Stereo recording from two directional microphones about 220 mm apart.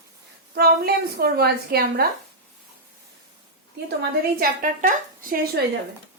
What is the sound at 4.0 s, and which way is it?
A woman's voice, 40° right (ahead or behind).